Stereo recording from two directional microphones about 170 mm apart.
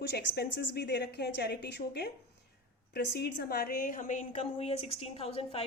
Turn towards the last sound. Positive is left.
turn(degrees=35)  # may be behind; listen again after turning